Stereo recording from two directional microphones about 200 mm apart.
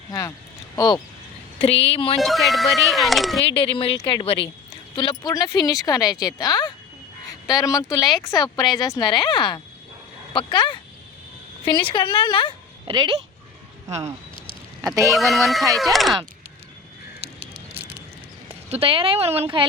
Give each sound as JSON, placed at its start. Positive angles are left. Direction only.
{"t": 0.1, "sound": "speech", "side_deg": 15}
{"t": 2.1, "sound": "speech", "side_deg": 0}
{"t": 3.4, "sound": "speech", "side_deg": 25}
{"t": 12.9, "sound": "speech", "side_deg": -20}
{"t": 14.8, "sound": "speech", "side_deg": -15}
{"t": 15.1, "sound": "speech", "side_deg": 0}
{"t": 17.2, "sound": "a sound", "side_deg": -30}
{"t": 18.4, "sound": "a woman's voice", "side_deg": -30}